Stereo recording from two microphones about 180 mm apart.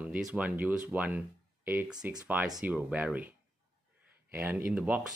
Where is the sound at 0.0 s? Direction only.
5° right (ahead or behind).